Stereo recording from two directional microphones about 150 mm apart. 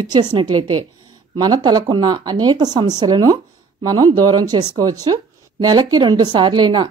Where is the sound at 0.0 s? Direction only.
30° right (ahead or behind).